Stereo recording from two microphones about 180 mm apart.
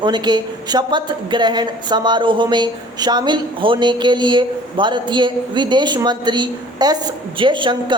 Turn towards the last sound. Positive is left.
turn(degrees=-25)  # may be behind; listen again after turning